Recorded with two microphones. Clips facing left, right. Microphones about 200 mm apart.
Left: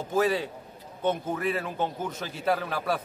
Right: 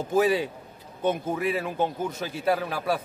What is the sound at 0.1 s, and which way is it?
A man's voice, 15° right (ahead or behind).